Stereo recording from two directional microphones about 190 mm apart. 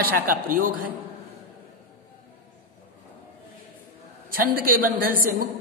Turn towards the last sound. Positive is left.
turn(degrees=-50)  # may be behind; listen again after turning